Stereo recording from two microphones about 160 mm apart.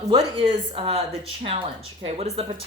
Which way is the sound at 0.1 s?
35° right (ahead or behind).